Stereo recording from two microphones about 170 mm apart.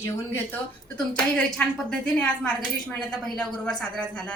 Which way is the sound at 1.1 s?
5° left (ahead or behind).